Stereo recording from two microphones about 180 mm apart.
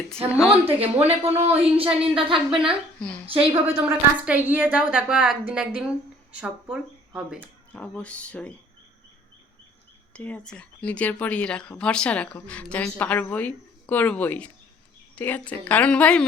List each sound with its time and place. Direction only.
0.6 s speech: 35° right (ahead or behind)
3.5 s a woman's voice: 10° right (ahead or behind)
7.3 s speech: 10° left (ahead or behind)
10.1 s speech: 5° left (ahead or behind)